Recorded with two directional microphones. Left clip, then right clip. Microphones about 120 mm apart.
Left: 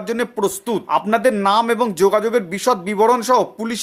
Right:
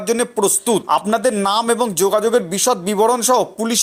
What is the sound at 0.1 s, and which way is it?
A man's voice, 20° right (ahead or behind).